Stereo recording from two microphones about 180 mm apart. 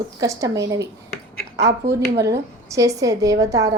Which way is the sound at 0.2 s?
20° right (ahead or behind).